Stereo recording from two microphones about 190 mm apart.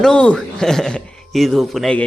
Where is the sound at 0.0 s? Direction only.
5° left (ahead or behind).